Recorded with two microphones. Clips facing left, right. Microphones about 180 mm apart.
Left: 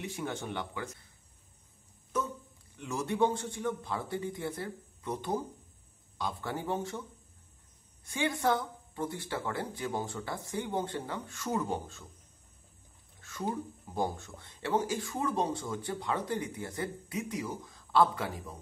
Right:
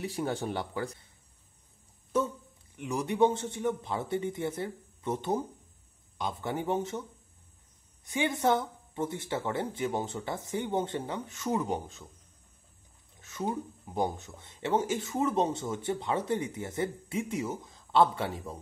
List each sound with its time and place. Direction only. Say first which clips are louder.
0.0 s speech: right 5 dB; 35° right (ahead or behind)
2.7 s speech: right 2 dB; 15° right (ahead or behind)
13.2 s speech: right 2 dB; 20° right (ahead or behind)